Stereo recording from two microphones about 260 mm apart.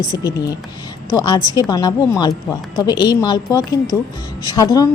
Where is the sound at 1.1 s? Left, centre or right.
Centre.